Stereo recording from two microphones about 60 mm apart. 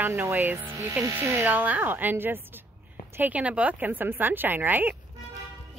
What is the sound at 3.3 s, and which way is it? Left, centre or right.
A woman's voice, right.